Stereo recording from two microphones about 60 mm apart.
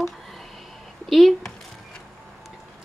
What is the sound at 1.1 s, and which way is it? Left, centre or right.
Speech, centre.